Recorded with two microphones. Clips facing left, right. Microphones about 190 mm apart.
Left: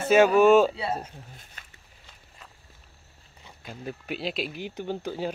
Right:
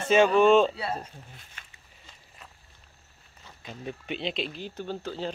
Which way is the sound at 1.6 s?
40° left (ahead or behind).